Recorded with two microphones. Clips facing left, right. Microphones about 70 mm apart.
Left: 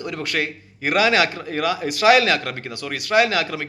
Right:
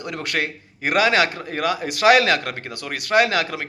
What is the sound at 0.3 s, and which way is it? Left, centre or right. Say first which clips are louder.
A man's voice: even; right.